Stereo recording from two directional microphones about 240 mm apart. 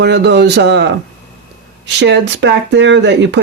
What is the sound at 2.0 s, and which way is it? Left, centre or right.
Speech, right.